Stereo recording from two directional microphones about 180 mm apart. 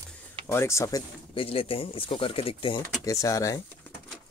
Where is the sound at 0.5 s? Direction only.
15° left (ahead or behind).